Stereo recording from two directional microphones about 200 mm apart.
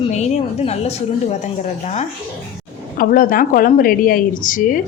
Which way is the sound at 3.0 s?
45° left (ahead or behind).